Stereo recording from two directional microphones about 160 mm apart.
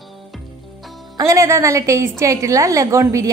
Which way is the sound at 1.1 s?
20° right (ahead or behind).